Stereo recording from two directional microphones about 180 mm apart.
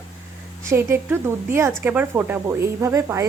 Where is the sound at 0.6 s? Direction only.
15° right (ahead or behind).